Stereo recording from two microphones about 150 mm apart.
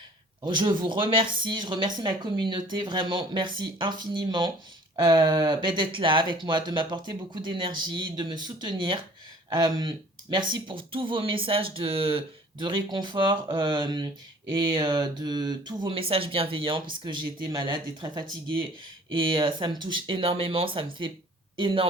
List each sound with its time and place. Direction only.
0.4 s speech: 30° right (ahead or behind)